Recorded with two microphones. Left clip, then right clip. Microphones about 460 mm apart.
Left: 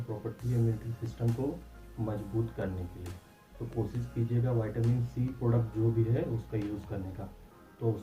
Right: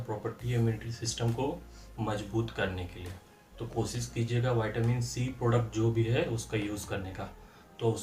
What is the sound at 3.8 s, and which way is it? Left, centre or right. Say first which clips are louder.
Speech: right 2 dB; right.